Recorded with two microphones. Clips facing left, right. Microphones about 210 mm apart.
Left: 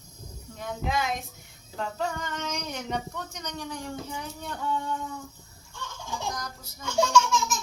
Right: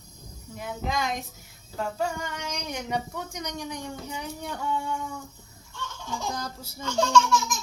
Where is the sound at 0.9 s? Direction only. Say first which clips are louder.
Even; 5° left (ahead or behind).